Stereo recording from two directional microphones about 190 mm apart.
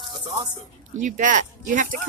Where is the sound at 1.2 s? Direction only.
40° right (ahead or behind).